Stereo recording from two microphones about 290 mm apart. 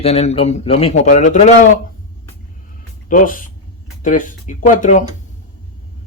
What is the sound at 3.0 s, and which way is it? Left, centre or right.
A man's voice, left.